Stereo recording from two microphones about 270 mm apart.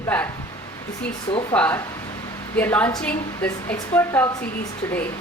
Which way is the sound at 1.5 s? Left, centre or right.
Centre.